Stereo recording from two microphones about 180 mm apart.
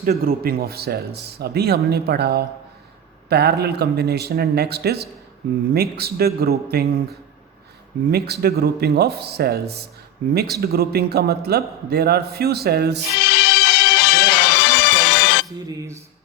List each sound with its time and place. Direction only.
0.0 s a man's voice: 55° right (ahead or behind)
8.1 s a man's voice: 60° right (ahead or behind)
13.2 s music: 70° left (ahead or behind)